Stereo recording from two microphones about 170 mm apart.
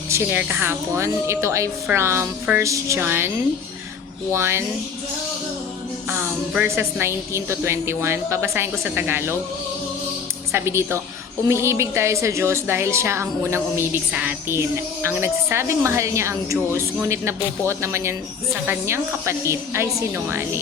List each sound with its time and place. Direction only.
0.1 s a woman's voice: 10° right (ahead or behind)
6.1 s a woman's voice: 10° right (ahead or behind)
10.5 s a woman's voice: 15° right (ahead or behind)